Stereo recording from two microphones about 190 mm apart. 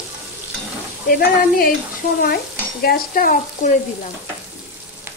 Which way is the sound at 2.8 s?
50° left (ahead or behind).